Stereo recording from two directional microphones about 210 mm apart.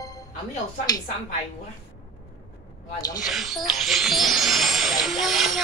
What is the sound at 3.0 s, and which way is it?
Speech, 20° left (ahead or behind).